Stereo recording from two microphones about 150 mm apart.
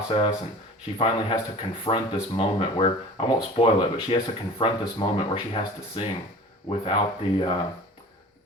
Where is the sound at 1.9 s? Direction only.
40° left (ahead or behind).